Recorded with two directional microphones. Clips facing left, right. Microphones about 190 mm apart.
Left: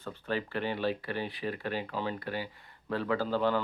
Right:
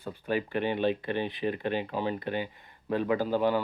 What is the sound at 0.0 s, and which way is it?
Speech, 15° right (ahead or behind).